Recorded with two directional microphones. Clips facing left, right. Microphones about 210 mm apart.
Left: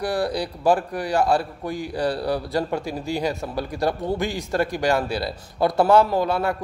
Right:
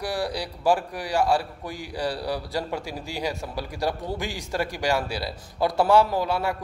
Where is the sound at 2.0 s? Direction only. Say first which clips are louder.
Left 4 dB; 50° left (ahead or behind).